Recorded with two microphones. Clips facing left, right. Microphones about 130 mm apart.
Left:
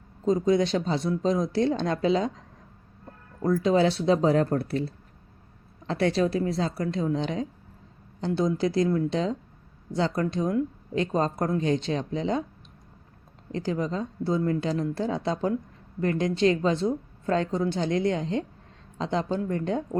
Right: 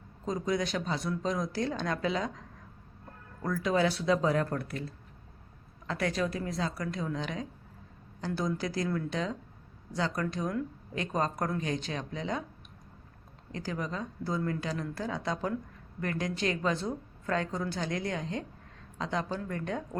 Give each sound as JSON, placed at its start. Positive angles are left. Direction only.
{"t": 0.3, "sound": "a woman's voice", "side_deg": 25}
{"t": 3.4, "sound": "a woman's voice", "side_deg": 25}
{"t": 13.5, "sound": "a woman's voice", "side_deg": 25}